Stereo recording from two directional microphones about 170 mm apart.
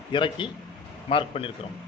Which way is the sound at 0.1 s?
30° left (ahead or behind).